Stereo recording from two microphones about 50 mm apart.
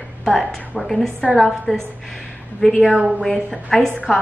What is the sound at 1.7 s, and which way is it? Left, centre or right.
Speech, left.